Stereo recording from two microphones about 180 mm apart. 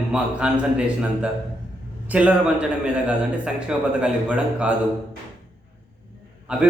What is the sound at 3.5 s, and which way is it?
A man's voice, 5° right (ahead or behind).